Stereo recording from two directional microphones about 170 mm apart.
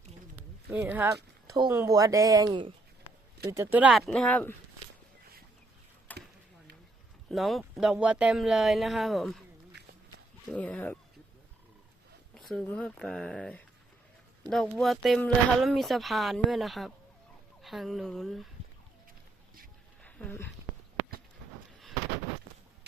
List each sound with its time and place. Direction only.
0.3 s speech: 10° right (ahead or behind); by 2.7 s 30° right (ahead or behind)
3.5 s speech: 15° right (ahead or behind); by 4.5 s 10° left (ahead or behind)
6.1 s a sound: 10° left (ahead or behind)
7.3 s speech: centre (ahead or behind)
10.5 s speech: 10° left (ahead or behind)
12.3 s speech: centre (ahead or behind)
20.0 s a sound: 5° left (ahead or behind)